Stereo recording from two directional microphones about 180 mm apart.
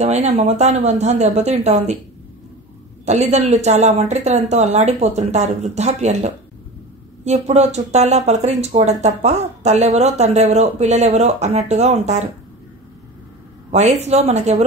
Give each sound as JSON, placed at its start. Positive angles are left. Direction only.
{"t": 0.0, "sound": "speech", "side_deg": -40}
{"t": 3.1, "sound": "speech", "side_deg": -40}
{"t": 13.7, "sound": "speech", "side_deg": -40}